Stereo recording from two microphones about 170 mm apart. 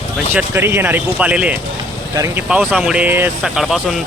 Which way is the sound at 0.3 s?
15° right (ahead or behind).